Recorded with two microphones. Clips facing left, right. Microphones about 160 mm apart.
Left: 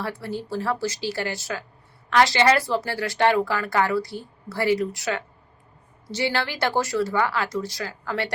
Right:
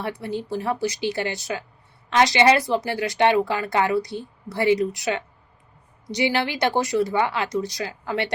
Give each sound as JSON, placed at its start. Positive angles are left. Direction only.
{"t": 0.0, "sound": "speech", "side_deg": -20}